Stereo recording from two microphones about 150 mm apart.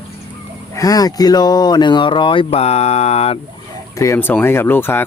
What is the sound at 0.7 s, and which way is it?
Speech, 25° left (ahead or behind).